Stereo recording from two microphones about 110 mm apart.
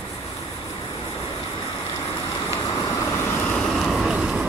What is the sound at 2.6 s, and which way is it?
Vehicle, 30° left (ahead or behind).